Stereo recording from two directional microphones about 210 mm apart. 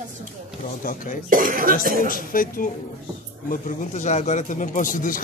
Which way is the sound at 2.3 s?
40° left (ahead or behind).